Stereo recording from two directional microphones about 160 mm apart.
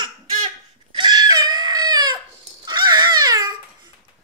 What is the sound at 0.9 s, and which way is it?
Screaming, 25° right (ahead or behind).